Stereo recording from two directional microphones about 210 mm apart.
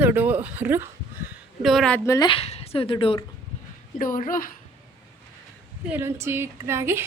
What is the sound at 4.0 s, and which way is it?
Speech, 40° left (ahead or behind).